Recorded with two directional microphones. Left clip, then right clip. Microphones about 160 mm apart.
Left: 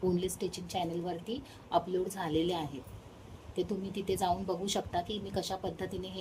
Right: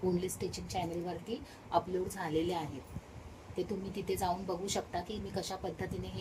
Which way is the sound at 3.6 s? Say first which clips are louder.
Left 3 dB; 55° left (ahead or behind).